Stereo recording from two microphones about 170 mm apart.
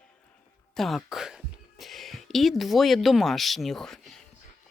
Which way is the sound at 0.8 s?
Centre (ahead or behind).